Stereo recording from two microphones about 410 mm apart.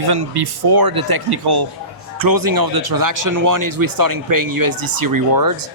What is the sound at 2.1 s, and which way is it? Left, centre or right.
A man's voice, right.